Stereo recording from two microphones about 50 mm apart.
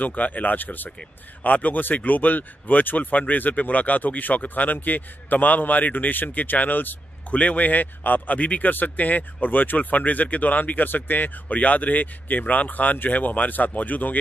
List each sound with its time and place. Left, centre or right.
0.0 s speech: left